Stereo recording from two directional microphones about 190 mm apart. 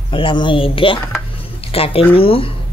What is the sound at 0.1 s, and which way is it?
Speech, 25° left (ahead or behind).